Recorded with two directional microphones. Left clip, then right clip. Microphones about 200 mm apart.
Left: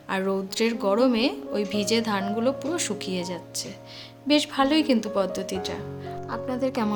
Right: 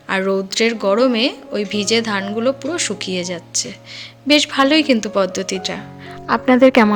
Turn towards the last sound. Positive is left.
turn(degrees=-25)  # may be behind; listen again after turning